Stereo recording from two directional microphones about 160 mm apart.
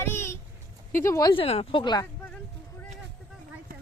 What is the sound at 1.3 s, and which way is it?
Speech, 35° left (ahead or behind).